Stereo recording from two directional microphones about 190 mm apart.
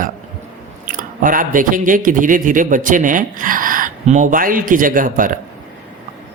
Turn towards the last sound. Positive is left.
turn(degrees=-45)  # may be behind; listen again after turning